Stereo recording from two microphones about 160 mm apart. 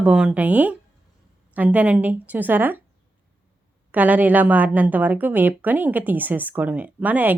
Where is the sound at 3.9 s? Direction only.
10° right (ahead or behind).